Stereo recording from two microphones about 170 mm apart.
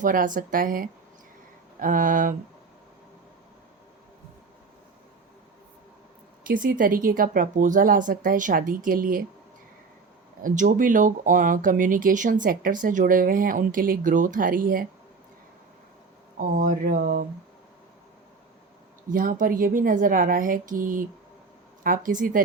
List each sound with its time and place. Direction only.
0.0 s speech: 50° right (ahead or behind)
6.5 s speech: 50° right (ahead or behind)
10.4 s speech: 50° right (ahead or behind)
16.4 s speech: 50° right (ahead or behind)
19.0 s speech: 50° right (ahead or behind)